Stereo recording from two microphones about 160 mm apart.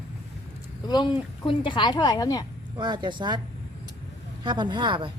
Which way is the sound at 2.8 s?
30° right (ahead or behind).